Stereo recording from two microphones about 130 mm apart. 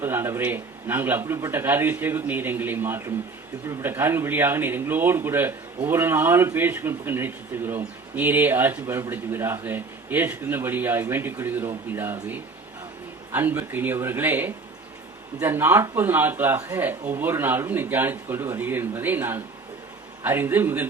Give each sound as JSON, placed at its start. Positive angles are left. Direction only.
{"t": 0.0, "sound": "speech", "side_deg": -20}